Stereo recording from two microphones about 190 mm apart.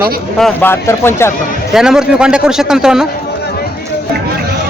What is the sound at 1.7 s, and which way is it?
A man's voice, 5° right (ahead or behind).